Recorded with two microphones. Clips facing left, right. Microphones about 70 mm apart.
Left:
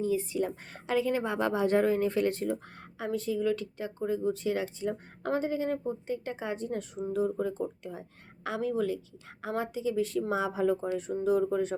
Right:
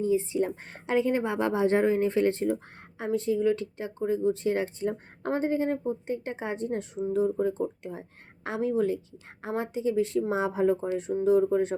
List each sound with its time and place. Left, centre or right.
0.0 s a woman's voice: right